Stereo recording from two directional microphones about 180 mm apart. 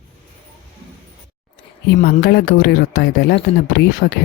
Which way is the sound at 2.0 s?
60° left (ahead or behind).